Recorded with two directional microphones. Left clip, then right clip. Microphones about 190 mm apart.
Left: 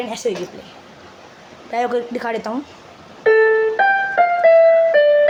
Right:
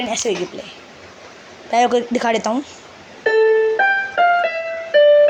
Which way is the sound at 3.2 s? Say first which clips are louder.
Left 1 dB; 25° left (ahead or behind).